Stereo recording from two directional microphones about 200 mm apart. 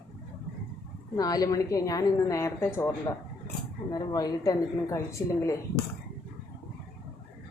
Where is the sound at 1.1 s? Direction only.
20° left (ahead or behind).